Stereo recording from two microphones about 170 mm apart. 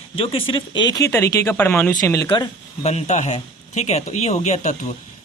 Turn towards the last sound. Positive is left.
turn(degrees=45)  # may be behind; listen again after turning